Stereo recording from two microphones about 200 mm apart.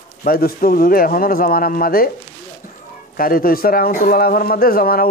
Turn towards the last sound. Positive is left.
turn(degrees=45)  # may be behind; listen again after turning